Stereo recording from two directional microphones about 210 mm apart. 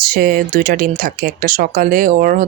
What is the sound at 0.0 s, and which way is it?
Speech, 45° right (ahead or behind).